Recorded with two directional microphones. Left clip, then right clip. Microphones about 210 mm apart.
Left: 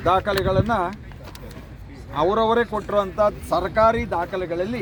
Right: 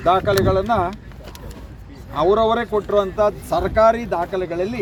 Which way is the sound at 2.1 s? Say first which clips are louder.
Right 2 dB; 10° left (ahead or behind).